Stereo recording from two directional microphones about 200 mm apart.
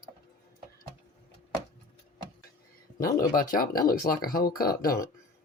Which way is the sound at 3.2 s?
45° left (ahead or behind).